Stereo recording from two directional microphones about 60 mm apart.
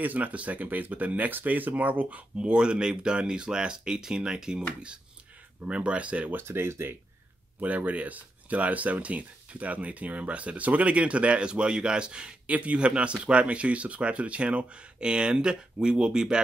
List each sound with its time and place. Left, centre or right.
0.0 s speech: right
6.3 s speech: right
7.6 s speech: right